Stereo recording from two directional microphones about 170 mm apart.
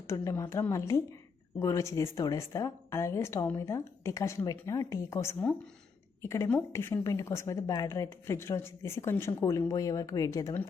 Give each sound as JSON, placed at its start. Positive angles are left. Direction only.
{"t": 0.1, "sound": "a woman's voice", "side_deg": 15}